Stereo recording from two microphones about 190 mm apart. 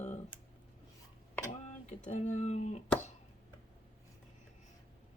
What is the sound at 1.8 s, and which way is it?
Speech, 35° left (ahead or behind).